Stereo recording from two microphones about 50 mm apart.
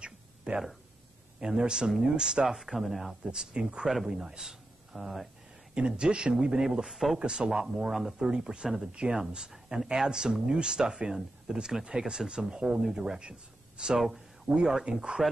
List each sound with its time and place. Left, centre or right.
0.5 s speech: right; by 3.2 s centre
3.3 s speech: centre
5.8 s speech: centre
7.2 s speech: centre
7.9 s speech: centre
8.3 s speech: centre